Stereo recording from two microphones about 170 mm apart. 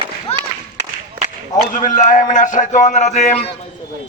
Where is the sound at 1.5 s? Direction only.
20° left (ahead or behind).